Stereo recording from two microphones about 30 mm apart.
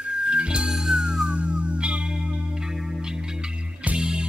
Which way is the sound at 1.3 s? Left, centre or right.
Right.